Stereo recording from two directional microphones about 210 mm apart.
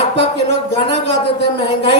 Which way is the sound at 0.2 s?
55° right (ahead or behind).